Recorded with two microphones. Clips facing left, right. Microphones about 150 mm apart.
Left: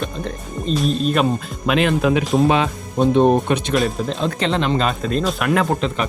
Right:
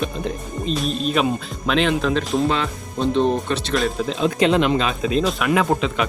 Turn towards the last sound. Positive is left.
turn(degrees=0)  # may be behind; listen again after turning